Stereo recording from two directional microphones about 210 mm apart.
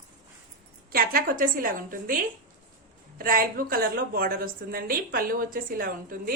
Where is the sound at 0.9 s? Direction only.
45° right (ahead or behind).